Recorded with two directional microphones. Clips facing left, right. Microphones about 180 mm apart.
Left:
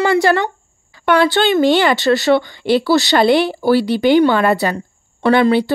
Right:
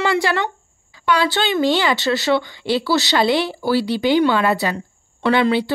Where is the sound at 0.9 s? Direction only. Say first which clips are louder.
Left 5 dB; 55° left (ahead or behind).